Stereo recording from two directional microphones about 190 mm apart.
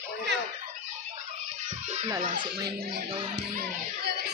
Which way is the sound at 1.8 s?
35° right (ahead or behind).